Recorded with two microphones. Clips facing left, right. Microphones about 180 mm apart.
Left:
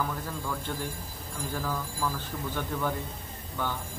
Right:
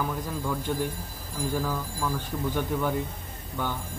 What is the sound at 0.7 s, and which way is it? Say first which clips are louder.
Speech: right 6 dB; 10° right (ahead or behind).